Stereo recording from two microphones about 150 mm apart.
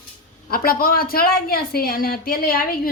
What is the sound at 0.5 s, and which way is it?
A woman's voice, 80° left.